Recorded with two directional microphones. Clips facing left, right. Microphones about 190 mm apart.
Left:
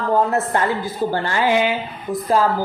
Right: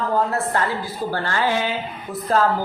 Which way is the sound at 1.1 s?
15° left (ahead or behind).